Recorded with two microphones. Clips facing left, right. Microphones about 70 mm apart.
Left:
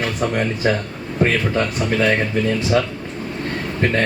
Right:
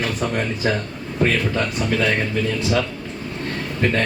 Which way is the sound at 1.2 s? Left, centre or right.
Left.